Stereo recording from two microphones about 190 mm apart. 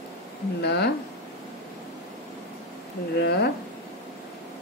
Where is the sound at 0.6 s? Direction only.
60° left (ahead or behind).